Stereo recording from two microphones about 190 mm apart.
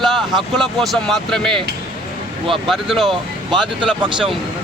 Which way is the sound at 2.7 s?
Centre (ahead or behind).